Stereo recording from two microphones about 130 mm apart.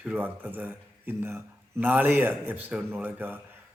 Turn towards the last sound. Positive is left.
turn(degrees=-15)  # may be behind; listen again after turning